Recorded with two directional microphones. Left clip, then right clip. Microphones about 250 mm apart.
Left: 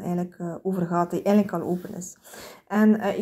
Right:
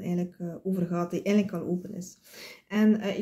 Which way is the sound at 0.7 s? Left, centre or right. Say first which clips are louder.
Left 6 dB; centre.